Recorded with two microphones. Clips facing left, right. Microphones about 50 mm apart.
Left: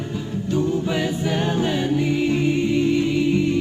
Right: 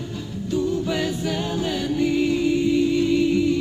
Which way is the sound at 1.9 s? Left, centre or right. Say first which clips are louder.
Right 3 dB; left.